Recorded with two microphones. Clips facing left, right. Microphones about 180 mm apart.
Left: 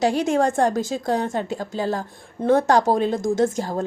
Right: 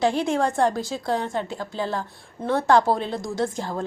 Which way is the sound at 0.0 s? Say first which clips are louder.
Left 2 dB; 40° left (ahead or behind).